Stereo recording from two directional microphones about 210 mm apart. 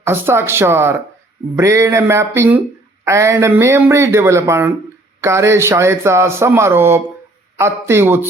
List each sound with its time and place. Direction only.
0.0 s speech: 10° right (ahead or behind)